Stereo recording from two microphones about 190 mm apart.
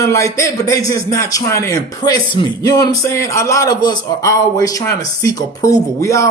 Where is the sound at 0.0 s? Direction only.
15° left (ahead or behind).